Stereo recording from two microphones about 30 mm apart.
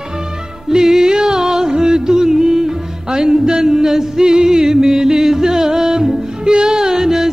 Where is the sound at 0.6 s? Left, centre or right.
Centre.